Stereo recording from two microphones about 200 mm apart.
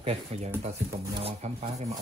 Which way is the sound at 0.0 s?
35° right (ahead or behind).